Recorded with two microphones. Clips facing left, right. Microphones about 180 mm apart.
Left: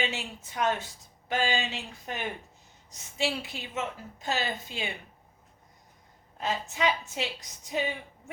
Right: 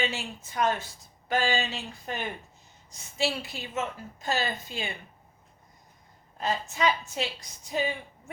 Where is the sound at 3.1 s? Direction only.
15° left (ahead or behind).